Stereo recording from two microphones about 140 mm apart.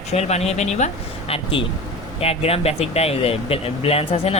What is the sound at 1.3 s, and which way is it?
Speech, 40° left (ahead or behind).